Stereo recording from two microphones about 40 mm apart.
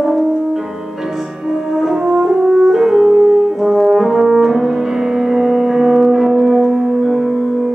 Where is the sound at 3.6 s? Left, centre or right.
Centre.